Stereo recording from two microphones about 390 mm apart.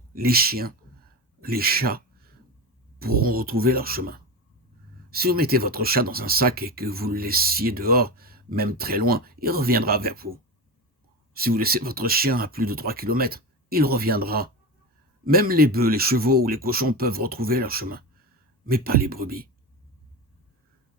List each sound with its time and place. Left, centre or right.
0.1 s speech: right
11.3 s speech: right